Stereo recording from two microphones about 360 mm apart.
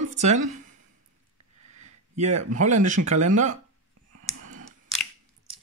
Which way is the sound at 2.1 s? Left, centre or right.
Right.